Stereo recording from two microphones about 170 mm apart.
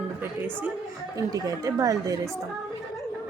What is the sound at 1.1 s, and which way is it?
Speech, 20° right (ahead or behind).